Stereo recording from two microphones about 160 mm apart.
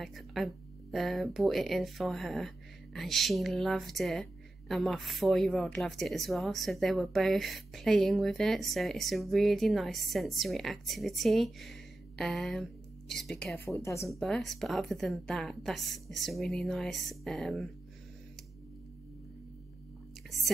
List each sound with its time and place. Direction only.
0.0 s speech: centre (ahead or behind)
13.7 s speech: 20° left (ahead or behind)
14.2 s speech: centre (ahead or behind)